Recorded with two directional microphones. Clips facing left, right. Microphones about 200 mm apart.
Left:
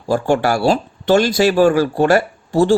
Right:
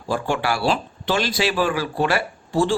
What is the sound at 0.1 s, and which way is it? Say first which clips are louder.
Speech: left 7 dB; 45° left (ahead or behind).